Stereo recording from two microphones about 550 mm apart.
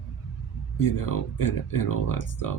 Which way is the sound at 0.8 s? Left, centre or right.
Left.